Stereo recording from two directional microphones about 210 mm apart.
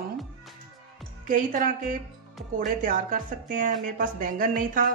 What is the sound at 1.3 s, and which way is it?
Speech, 40° right (ahead or behind).